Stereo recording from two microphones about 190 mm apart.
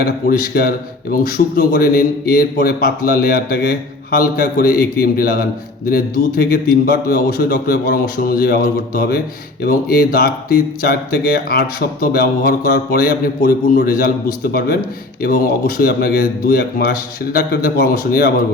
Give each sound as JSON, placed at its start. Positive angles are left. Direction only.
{"t": 0.0, "sound": "speech", "side_deg": 50}
{"t": 15.2, "sound": "speech", "side_deg": 50}